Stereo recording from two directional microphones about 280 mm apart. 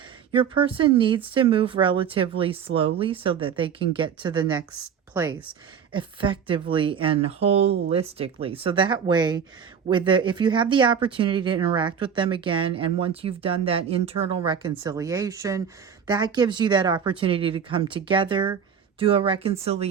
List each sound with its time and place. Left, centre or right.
0.3 s speech: centre